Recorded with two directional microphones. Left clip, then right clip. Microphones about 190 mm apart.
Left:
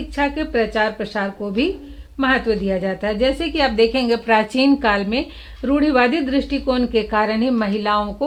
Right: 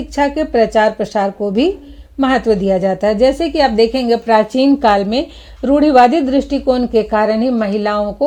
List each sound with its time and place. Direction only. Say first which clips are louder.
0.2 s a woman's voice: right 6 dB; 35° right (ahead or behind)